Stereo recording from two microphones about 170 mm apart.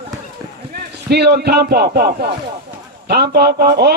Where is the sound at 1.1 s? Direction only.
75° right (ahead or behind).